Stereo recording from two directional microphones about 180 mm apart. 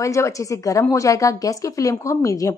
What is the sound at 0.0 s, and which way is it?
A woman's voice, 15° left (ahead or behind).